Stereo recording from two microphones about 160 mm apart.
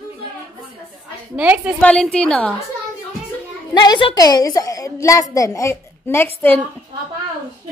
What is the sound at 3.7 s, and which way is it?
A woman's voice, 25° left (ahead or behind).